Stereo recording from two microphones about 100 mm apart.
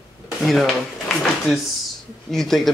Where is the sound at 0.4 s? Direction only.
Centre (ahead or behind).